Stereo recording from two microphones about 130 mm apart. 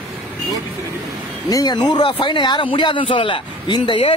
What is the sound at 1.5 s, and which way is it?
Speech, 30° left (ahead or behind).